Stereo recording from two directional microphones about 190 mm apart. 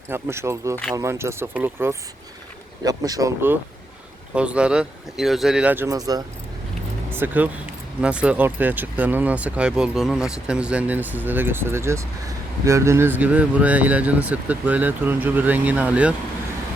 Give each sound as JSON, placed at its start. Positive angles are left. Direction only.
{"t": 0.1, "sound": "speech", "side_deg": -15}